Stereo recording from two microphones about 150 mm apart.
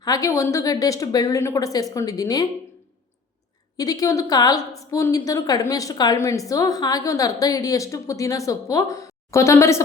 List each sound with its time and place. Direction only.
0.0 s a woman's voice: 25° left (ahead or behind)
3.8 s a woman's voice: 25° left (ahead or behind)